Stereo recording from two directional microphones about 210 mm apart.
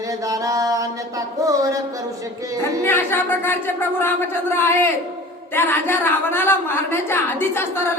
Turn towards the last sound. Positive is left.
turn(degrees=10)  # may be behind; listen again after turning